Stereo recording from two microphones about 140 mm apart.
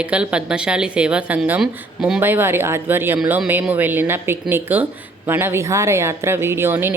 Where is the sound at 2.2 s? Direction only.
15° right (ahead or behind).